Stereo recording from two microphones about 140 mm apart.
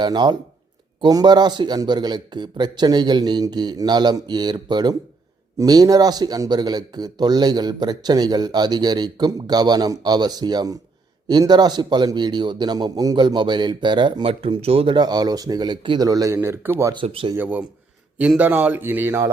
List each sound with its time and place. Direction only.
0.0 s a man's voice: 30° right (ahead or behind)
16.0 s a man's voice: 25° right (ahead or behind)
16.9 s a man's voice: 40° right (ahead or behind)
17.3 s a man's voice: 10° right (ahead or behind)